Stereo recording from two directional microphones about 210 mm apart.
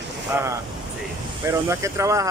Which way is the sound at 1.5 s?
15° right (ahead or behind).